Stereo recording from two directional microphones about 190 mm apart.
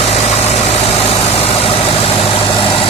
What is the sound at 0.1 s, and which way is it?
Vehicle, 30° left (ahead or behind).